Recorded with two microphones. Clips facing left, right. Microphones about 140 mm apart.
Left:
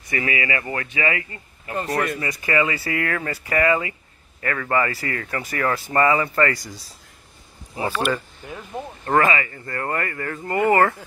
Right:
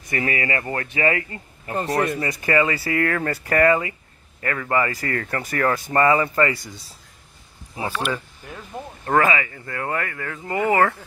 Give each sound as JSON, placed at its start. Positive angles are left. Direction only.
{"t": 0.1, "sound": "speech", "side_deg": -40}
{"t": 4.4, "sound": "speech", "side_deg": -25}
{"t": 4.9, "sound": "speech", "side_deg": -45}
{"t": 5.7, "sound": "speech", "side_deg": -25}
{"t": 6.5, "sound": "speech", "side_deg": 0}
{"t": 8.1, "sound": "speech", "side_deg": 5}
{"t": 9.0, "sound": "speech", "side_deg": -10}